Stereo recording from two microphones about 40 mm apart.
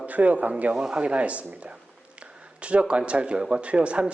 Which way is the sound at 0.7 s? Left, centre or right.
Right.